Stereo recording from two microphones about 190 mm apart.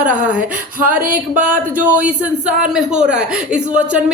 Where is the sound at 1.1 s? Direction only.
5° right (ahead or behind).